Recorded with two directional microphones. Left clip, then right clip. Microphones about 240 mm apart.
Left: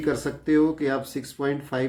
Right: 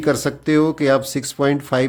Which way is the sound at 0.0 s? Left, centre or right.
Right.